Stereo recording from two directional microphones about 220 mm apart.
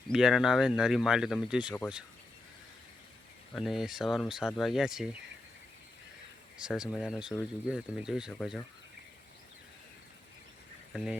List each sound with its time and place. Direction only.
0.1 s speech: centre (ahead or behind)
3.5 s speech: centre (ahead or behind)
6.6 s speech: 5° right (ahead or behind)
10.9 s speech: centre (ahead or behind)